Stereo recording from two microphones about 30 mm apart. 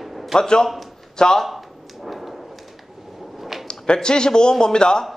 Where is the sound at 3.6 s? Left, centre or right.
Left.